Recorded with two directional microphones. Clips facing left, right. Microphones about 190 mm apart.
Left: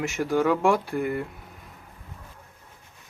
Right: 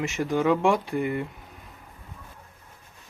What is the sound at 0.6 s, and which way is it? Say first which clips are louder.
Speech: even; 20° right (ahead or behind).